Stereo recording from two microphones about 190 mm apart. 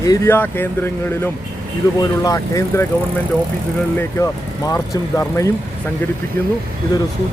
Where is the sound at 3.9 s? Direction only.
15° left (ahead or behind).